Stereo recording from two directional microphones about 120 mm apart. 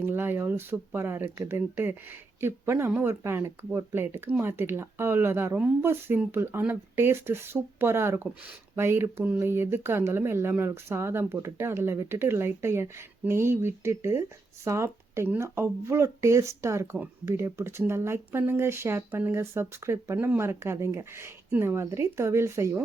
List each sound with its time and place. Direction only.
0.0 s speech: 20° right (ahead or behind)